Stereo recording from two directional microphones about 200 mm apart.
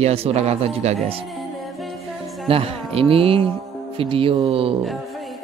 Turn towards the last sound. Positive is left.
turn(degrees=-25)  # may be behind; listen again after turning